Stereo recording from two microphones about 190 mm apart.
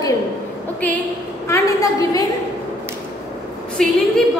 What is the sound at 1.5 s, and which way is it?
Speech, 20° left (ahead or behind).